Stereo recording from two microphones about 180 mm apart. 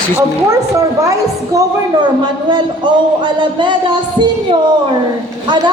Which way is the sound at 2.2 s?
25° right (ahead or behind).